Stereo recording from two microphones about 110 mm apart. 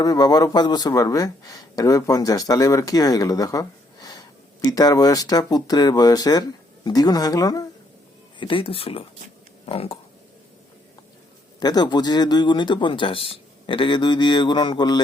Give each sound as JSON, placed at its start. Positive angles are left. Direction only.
{"t": 0.0, "sound": "speech", "side_deg": 35}
{"t": 8.4, "sound": "speech", "side_deg": 50}
{"t": 11.6, "sound": "speech", "side_deg": 40}